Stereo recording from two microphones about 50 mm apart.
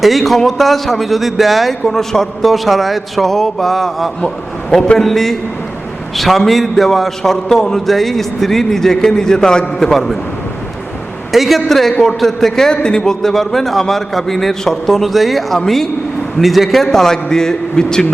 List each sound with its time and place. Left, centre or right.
0.0 s a man's voice: centre
11.3 s a man's voice: centre